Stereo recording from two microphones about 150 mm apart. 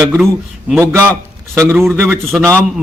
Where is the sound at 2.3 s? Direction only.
Centre (ahead or behind).